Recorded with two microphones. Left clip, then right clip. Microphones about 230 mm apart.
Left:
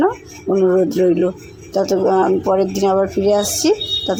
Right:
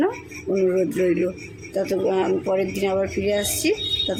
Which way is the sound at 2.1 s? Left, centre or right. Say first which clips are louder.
Left 7 dB; centre.